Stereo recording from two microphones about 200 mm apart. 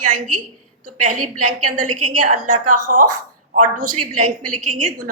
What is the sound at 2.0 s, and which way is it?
A woman's voice, 40° right (ahead or behind).